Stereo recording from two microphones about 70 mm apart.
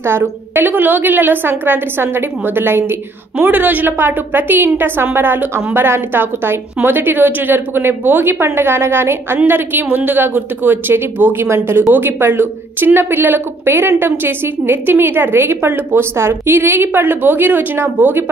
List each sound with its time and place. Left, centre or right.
0.0 s a woman's voice: right